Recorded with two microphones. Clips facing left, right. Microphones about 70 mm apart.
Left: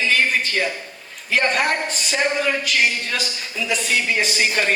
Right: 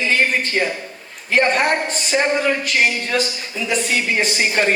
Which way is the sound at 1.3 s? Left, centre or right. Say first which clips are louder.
Right 3 dB; right.